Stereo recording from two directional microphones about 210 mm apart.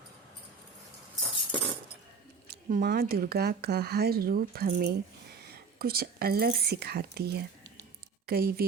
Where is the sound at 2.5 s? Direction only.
45° right (ahead or behind).